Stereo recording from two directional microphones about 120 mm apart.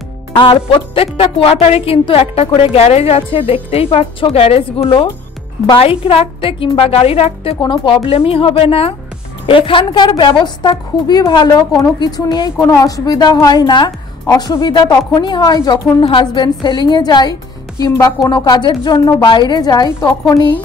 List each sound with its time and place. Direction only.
0.4 s a woman's voice: 45° left (ahead or behind)
7.6 s a woman's voice: 40° left (ahead or behind)